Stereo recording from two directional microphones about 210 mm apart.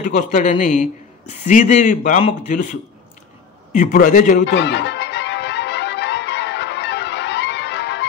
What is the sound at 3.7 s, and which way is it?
Speech, 35° left (ahead or behind).